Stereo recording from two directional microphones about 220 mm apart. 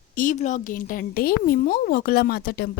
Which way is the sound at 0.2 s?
35° left (ahead or behind).